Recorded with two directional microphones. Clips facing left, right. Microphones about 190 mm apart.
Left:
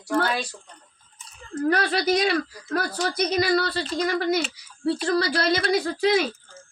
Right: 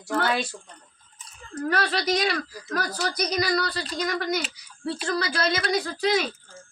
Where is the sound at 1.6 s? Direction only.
25° left (ahead or behind).